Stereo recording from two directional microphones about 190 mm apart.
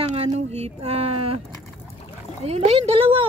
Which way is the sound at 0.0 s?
35° right (ahead or behind).